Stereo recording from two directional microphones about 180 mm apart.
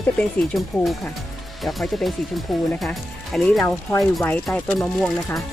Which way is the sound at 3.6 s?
15° left (ahead or behind).